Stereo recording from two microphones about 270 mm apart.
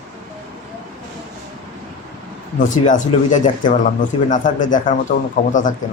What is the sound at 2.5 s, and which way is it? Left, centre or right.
Speech, left.